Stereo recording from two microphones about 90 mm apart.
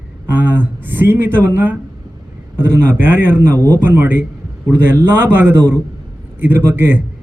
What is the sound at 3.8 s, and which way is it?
A man's voice, 25° right (ahead or behind).